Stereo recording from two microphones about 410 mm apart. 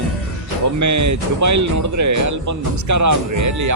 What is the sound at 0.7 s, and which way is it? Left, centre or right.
Speech, right.